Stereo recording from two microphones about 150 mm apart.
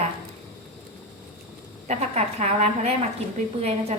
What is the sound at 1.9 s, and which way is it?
A woman's voice, 45° right (ahead or behind).